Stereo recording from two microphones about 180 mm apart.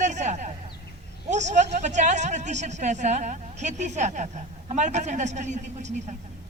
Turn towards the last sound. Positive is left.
turn(degrees=-40)  # may be behind; listen again after turning